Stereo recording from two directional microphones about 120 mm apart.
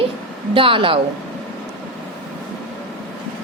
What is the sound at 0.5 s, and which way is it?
Speech, 45° right (ahead or behind).